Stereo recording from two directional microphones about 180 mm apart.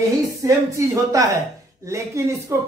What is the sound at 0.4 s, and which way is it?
Speech, 15° right (ahead or behind).